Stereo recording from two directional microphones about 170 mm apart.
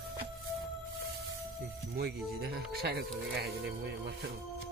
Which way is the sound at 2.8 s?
70° right (ahead or behind).